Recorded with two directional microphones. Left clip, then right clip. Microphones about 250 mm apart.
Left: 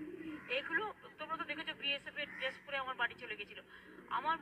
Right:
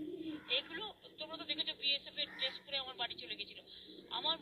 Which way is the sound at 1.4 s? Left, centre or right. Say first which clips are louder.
Right 6 dB; right.